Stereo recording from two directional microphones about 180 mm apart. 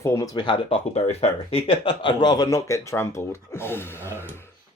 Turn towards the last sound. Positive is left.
turn(degrees=15)  # may be behind; listen again after turning